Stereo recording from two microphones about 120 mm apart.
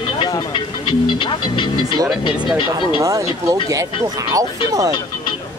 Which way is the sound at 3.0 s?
25° right (ahead or behind).